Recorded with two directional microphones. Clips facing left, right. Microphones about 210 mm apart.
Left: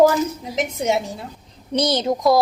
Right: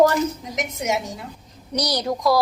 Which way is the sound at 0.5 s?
30° left (ahead or behind).